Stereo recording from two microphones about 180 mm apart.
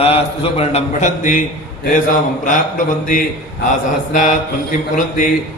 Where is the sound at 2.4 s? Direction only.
50° left (ahead or behind).